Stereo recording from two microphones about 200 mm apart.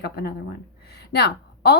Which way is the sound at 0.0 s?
55° left (ahead or behind).